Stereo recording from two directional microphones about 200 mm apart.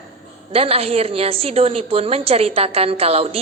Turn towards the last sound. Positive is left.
turn(degrees=-30)  # may be behind; listen again after turning